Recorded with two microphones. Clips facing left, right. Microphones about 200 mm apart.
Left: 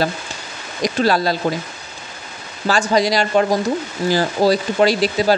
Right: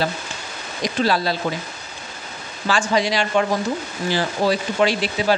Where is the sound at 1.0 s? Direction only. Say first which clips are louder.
Left 3 dB; 45° left (ahead or behind).